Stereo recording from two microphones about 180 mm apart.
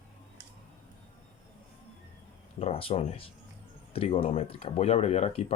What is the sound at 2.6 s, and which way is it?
Speech, 35° left (ahead or behind).